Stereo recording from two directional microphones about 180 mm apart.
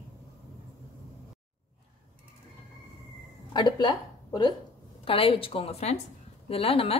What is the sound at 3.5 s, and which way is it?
A woman's voice, 25° left (ahead or behind).